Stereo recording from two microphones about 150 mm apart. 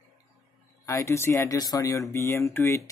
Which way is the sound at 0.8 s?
20° left (ahead or behind).